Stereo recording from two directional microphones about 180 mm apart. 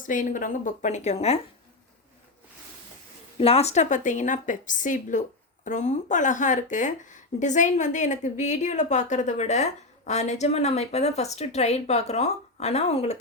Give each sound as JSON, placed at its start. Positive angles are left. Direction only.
{"t": 0.0, "sound": "a woman's voice", "side_deg": 45}
{"t": 3.3, "sound": "a woman's voice", "side_deg": 35}